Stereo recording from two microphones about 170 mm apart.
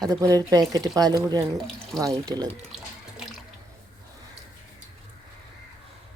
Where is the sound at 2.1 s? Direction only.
20° right (ahead or behind).